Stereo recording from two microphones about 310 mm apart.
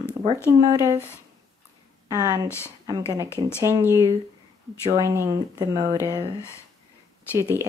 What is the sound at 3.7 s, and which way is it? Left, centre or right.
Speech, centre.